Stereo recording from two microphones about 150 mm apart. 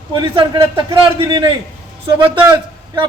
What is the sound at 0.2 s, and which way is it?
Speech, 30° right (ahead or behind).